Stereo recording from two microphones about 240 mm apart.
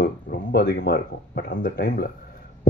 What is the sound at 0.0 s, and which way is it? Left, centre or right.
Speech, left.